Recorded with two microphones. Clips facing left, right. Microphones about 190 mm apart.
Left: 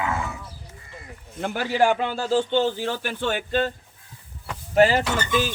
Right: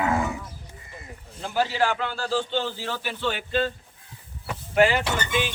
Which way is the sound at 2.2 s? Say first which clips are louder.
Left 6 dB; 50° left (ahead or behind).